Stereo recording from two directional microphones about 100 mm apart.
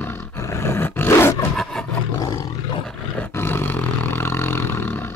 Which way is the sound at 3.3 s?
20° left (ahead or behind).